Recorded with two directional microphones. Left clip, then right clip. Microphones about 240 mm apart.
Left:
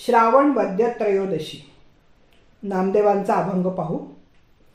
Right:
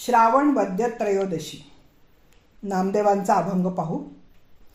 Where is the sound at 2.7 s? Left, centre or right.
Right.